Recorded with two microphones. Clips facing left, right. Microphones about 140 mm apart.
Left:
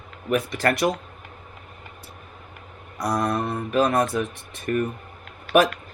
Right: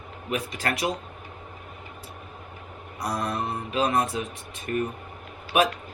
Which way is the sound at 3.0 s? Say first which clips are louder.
Left 5 dB; 45° left (ahead or behind).